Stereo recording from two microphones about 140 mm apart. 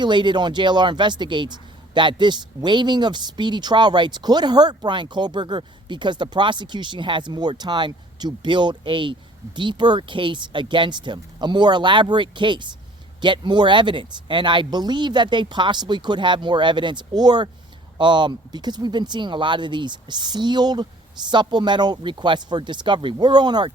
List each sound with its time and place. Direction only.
0.0 s speech: 35° right (ahead or behind)